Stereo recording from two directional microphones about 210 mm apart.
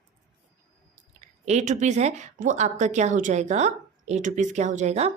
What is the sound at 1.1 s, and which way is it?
Speech, 30° right (ahead or behind).